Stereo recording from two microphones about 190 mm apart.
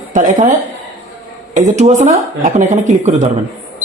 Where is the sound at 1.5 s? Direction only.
40° right (ahead or behind).